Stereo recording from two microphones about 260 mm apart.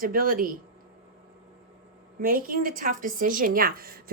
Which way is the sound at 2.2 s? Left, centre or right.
Right.